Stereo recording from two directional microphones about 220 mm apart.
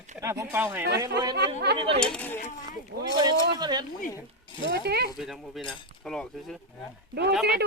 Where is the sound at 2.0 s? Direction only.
5° left (ahead or behind).